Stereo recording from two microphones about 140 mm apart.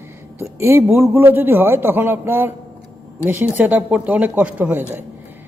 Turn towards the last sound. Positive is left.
turn(degrees=-10)  # may be behind; listen again after turning